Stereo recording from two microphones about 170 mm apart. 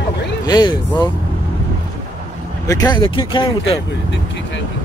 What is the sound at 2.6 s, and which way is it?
Speech, 20° left (ahead or behind).